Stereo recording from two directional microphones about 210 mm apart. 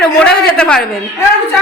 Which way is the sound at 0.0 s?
5° left (ahead or behind).